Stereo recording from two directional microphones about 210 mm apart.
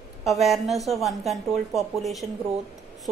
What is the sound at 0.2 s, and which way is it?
Speech, centre (ahead or behind).